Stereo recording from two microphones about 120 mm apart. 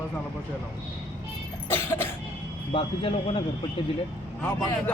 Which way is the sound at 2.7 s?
50° left (ahead or behind).